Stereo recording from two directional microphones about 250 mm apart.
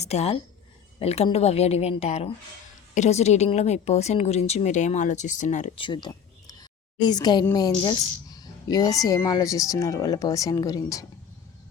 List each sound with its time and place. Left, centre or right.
0.0 s a woman's voice: left